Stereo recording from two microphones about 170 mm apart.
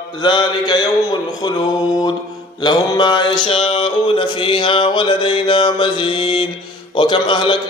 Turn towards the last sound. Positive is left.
turn(degrees=30)  # may be behind; listen again after turning